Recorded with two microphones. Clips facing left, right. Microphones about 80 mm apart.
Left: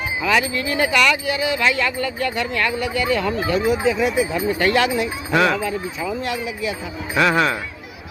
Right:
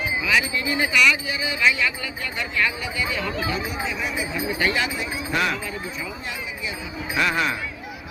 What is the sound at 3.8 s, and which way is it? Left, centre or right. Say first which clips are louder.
Speech: left 9 dB; left.